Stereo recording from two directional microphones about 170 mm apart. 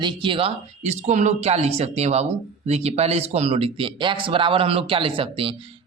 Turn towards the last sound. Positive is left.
turn(degrees=-30)  # may be behind; listen again after turning